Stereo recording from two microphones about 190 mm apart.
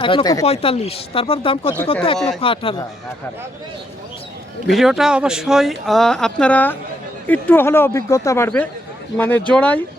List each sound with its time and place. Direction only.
0.0 s speech: 25° left (ahead or behind)
2.1 s speech: centre (ahead or behind)
2.4 s speech: 30° left (ahead or behind)
4.6 s speech: centre (ahead or behind)